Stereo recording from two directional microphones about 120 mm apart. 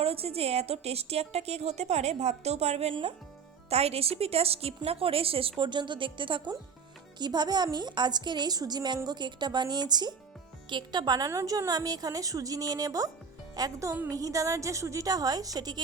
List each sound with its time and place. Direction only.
0.0 s a woman's voice: 55° right (ahead or behind); by 15.8 s 35° right (ahead or behind)